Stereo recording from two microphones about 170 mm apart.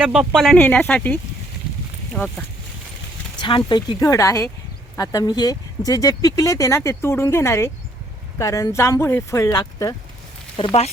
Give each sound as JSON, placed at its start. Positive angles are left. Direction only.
{"t": 0.0, "sound": "speech", "side_deg": -5}
{"t": 3.4, "sound": "speech", "side_deg": 25}
{"t": 10.6, "sound": "speech", "side_deg": 35}